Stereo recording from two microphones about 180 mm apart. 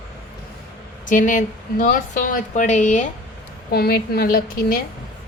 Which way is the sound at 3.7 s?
60° left (ahead or behind).